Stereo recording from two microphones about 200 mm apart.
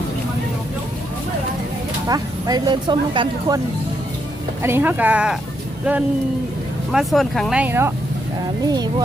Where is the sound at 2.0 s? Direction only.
20° right (ahead or behind).